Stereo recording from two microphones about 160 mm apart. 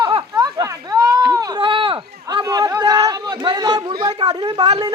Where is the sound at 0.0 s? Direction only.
25° right (ahead or behind).